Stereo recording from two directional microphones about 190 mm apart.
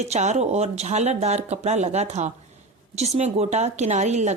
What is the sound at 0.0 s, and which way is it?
A woman's voice, 35° right (ahead or behind).